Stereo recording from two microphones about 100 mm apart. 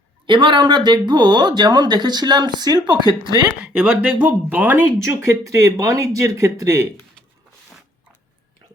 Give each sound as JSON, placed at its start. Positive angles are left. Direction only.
{"t": 0.3, "sound": "speech", "side_deg": -50}
{"t": 3.6, "sound": "speech", "side_deg": -15}
{"t": 5.2, "sound": "speech", "side_deg": -30}